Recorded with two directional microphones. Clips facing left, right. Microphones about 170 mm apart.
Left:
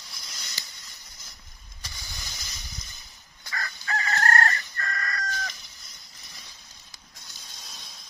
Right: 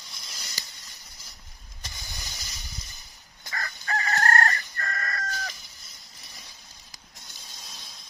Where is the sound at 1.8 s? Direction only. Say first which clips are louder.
Right 1 dB; 15° right (ahead or behind).